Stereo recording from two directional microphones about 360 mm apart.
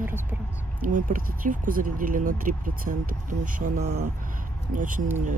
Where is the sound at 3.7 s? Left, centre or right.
Right.